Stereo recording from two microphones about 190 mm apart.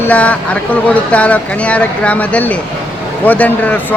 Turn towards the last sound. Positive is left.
turn(degrees=10)  # may be behind; listen again after turning